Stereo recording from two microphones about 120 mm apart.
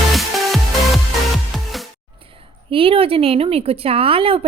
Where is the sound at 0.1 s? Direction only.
Centre (ahead or behind).